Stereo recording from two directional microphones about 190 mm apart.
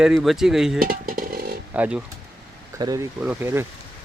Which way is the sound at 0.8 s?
50° right (ahead or behind).